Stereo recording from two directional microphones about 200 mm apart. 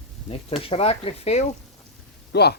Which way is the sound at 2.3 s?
55° left (ahead or behind).